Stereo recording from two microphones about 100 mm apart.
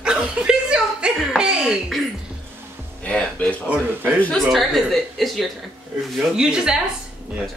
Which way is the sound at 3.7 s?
20° right (ahead or behind).